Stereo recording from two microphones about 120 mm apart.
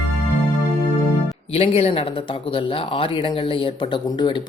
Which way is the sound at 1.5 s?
55° left (ahead or behind).